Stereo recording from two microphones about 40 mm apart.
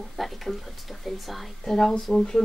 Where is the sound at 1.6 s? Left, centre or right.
Centre.